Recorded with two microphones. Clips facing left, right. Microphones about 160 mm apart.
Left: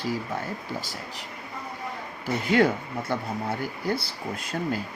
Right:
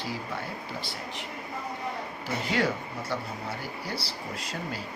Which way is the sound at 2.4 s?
55° left (ahead or behind).